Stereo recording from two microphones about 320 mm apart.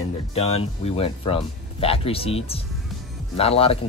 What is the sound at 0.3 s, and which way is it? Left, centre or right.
Speech, centre.